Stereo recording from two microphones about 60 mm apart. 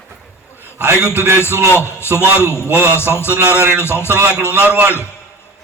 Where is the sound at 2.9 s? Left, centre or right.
Left.